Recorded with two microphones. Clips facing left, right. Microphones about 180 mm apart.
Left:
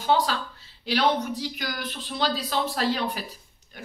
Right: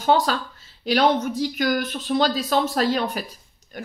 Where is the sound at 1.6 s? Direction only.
45° right (ahead or behind).